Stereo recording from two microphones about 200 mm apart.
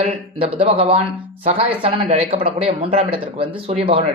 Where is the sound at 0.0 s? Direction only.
30° right (ahead or behind).